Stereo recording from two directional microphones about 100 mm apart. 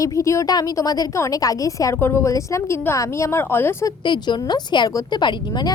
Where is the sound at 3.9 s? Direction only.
45° left (ahead or behind).